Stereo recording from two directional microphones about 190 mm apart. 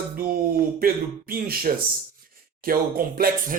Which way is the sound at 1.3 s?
50° right (ahead or behind).